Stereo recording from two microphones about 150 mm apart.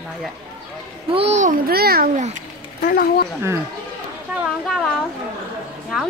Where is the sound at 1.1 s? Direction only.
45° right (ahead or behind).